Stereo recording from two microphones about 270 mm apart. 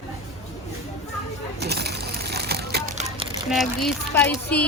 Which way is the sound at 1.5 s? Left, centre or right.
Right.